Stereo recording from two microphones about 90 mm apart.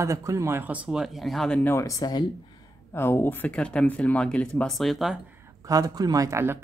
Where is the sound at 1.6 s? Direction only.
30° left (ahead or behind).